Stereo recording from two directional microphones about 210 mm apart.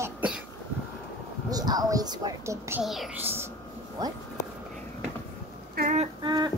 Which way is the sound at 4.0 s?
20° right (ahead or behind).